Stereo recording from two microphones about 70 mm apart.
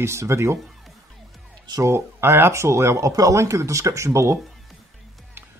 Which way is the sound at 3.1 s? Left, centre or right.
Right.